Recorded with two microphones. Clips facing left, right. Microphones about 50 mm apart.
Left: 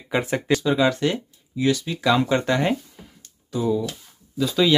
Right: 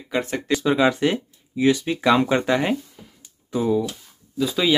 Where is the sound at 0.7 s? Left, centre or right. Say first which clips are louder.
Right 3 dB; right.